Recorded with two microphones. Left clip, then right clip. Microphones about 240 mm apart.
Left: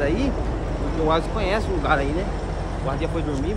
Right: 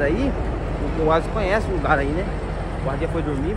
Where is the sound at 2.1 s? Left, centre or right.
Left.